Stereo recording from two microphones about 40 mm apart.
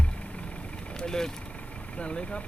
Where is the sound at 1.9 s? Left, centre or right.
Left.